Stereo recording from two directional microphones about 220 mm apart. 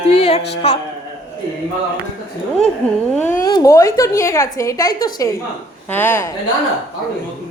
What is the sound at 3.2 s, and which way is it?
A woman's voice, 10° left (ahead or behind).